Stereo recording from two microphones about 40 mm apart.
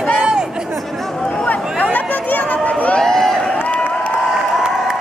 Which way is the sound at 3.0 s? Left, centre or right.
Centre.